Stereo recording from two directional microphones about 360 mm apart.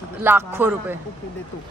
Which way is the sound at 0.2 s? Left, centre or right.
Centre.